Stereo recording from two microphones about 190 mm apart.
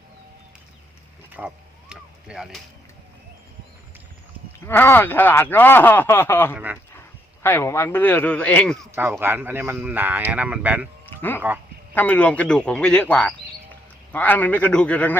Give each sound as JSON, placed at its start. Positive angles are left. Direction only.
{"t": 1.3, "sound": "a sound", "side_deg": -5}
{"t": 4.6, "sound": "speech", "side_deg": 10}
{"t": 9.0, "sound": "speech", "side_deg": -10}
{"t": 11.9, "sound": "speech", "side_deg": 10}